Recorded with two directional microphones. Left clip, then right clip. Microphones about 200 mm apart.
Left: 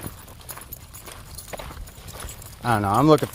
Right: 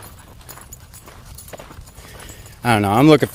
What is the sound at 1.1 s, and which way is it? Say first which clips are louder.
Clip-clop: left 1 dB; 50° left (ahead or behind).